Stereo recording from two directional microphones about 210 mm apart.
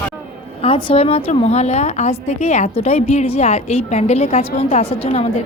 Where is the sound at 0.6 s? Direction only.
25° left (ahead or behind).